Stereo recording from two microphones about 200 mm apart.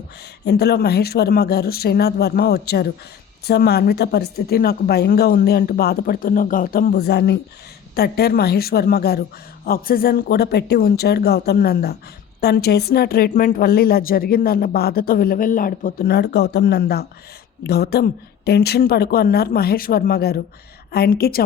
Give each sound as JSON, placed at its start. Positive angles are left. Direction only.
{"t": 0.4, "sound": "a woman's voice", "side_deg": 55}